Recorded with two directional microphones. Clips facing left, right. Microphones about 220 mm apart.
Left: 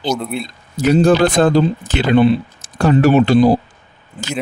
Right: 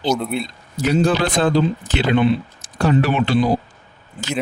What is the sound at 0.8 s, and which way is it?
Speech, 45° left (ahead or behind).